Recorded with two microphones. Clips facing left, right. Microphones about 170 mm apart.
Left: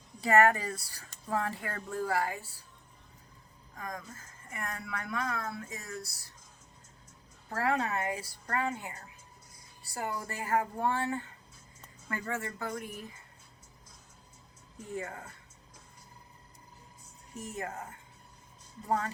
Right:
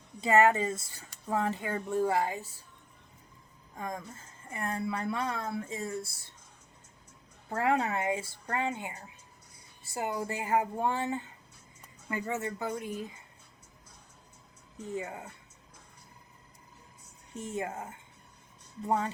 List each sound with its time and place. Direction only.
0.2 s a woman's voice: 20° right (ahead or behind)
3.8 s a woman's voice: 25° right (ahead or behind)
7.5 s a woman's voice: 25° right (ahead or behind)
14.9 s speech: 15° right (ahead or behind)
17.3 s a woman's voice: 25° right (ahead or behind)